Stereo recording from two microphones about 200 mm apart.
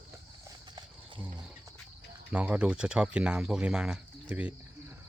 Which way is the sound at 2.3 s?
5° right (ahead or behind).